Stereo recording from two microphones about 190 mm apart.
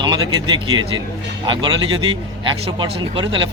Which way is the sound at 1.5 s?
25° right (ahead or behind).